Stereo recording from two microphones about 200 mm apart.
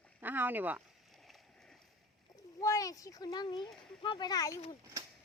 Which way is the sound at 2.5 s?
15° left (ahead or behind).